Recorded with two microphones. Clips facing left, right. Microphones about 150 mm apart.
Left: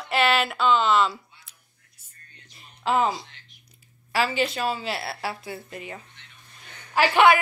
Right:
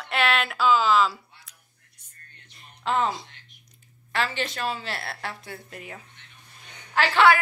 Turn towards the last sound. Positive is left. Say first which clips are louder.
# left 2 dB
turn(degrees=15)  # may be behind; listen again after turning